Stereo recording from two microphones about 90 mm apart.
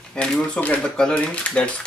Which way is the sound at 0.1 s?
15° left (ahead or behind).